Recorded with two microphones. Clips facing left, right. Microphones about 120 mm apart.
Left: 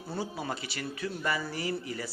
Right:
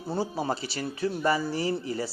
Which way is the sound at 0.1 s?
30° right (ahead or behind).